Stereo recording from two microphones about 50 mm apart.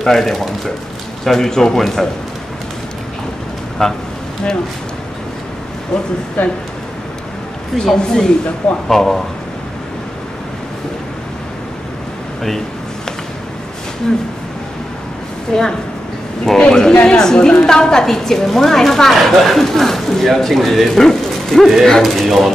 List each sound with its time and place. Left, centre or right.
0.0 s a woman's voice: centre
3.8 s a woman's voice: centre
6.4 s speech: left
7.7 s a woman's voice: centre
15.5 s a woman's voice: centre